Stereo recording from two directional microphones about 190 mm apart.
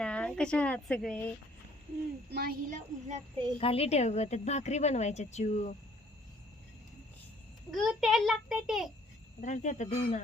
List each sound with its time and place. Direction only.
0.0 s speech: 5° left (ahead or behind)
2.3 s speech: 55° right (ahead or behind)
3.6 s a woman's voice: 30° left (ahead or behind)
7.7 s a child's voice: centre (ahead or behind)
9.4 s a woman's voice: 40° left (ahead or behind)